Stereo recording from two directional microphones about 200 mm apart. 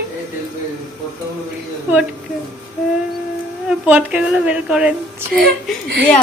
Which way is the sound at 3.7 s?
5° right (ahead or behind).